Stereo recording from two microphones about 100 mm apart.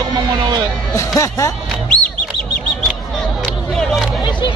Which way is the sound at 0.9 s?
30° left (ahead or behind).